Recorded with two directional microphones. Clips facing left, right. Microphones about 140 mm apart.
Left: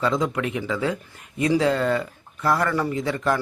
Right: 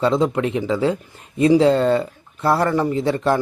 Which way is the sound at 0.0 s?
30° right (ahead or behind).